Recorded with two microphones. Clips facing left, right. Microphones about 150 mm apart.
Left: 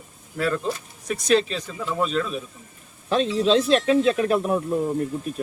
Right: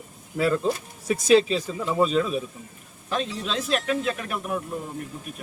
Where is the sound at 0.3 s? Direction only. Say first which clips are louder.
Right 2 dB; 5° right (ahead or behind).